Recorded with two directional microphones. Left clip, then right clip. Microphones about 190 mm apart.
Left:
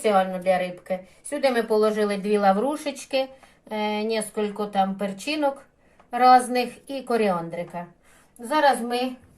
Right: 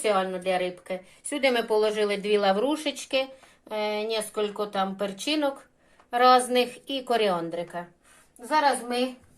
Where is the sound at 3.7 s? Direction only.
40° right (ahead or behind).